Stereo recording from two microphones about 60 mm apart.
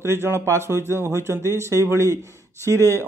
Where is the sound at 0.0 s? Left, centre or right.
Right.